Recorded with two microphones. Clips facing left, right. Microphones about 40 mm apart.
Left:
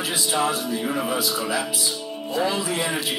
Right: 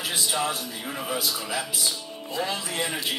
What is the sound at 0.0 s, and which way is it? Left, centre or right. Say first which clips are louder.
A man's voice: left 4 dB; left.